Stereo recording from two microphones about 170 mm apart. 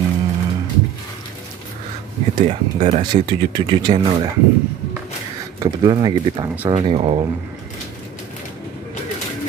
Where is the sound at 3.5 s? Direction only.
25° right (ahead or behind).